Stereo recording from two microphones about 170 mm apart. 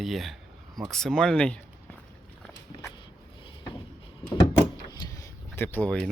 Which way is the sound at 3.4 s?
30° left (ahead or behind).